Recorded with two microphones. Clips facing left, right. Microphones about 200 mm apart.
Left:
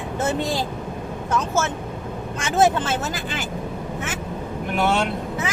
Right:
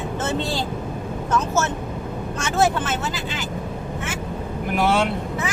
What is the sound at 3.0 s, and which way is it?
Speech, 50° left (ahead or behind).